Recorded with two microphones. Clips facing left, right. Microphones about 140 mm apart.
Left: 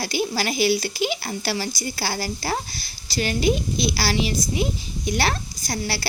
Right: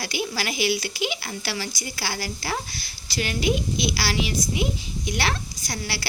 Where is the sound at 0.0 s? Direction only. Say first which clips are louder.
Left 4 dB; 35° left (ahead or behind).